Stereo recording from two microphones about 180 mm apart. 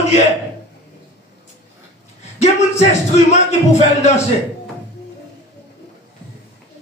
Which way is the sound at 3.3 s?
40° left (ahead or behind).